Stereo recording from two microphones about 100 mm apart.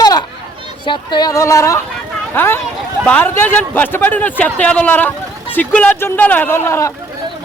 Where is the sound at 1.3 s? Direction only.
35° left (ahead or behind).